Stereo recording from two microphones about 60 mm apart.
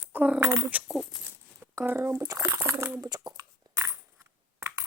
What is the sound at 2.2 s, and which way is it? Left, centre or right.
Speech, right.